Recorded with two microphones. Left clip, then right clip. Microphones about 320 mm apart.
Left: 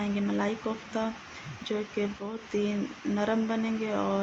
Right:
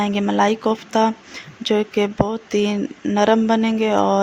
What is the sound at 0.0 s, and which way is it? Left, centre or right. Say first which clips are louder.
Speech: right 13 dB; right.